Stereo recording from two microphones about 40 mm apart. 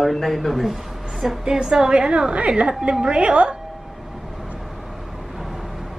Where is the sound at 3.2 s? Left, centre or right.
Right.